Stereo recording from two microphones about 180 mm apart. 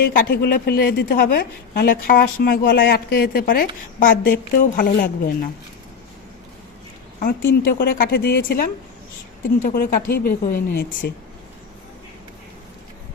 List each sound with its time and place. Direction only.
0.0 s a woman's voice: 55° left (ahead or behind)
7.2 s a woman's voice: 55° left (ahead or behind)